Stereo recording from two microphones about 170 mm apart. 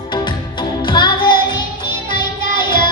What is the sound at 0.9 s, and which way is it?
Music, 25° left (ahead or behind).